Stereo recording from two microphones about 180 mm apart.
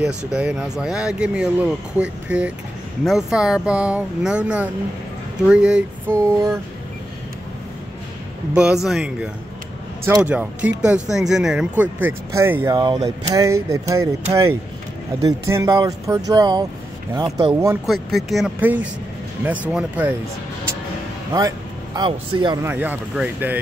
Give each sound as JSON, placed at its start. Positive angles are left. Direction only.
{"t": 0.3, "sound": "speech", "side_deg": -5}
{"t": 8.5, "sound": "speech", "side_deg": -5}
{"t": 17.8, "sound": "speech", "side_deg": 0}
{"t": 21.3, "sound": "speech", "side_deg": -20}
{"t": 22.6, "sound": "speech", "side_deg": -10}